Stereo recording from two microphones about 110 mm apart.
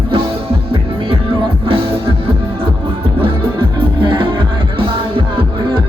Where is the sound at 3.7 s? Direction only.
45° right (ahead or behind).